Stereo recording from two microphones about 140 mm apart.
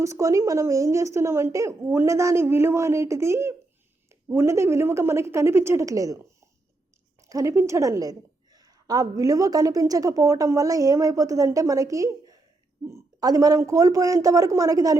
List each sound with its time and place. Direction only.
0.0 s a woman's voice: 20° right (ahead or behind)
7.2 s a woman's voice: 25° right (ahead or behind)